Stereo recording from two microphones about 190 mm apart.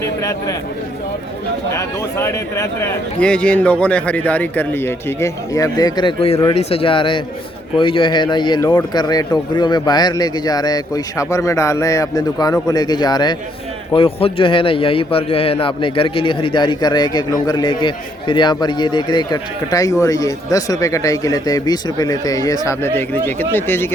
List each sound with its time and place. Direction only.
0.2 s speech: 15° left (ahead or behind)
1.7 s a man's voice: 15° left (ahead or behind)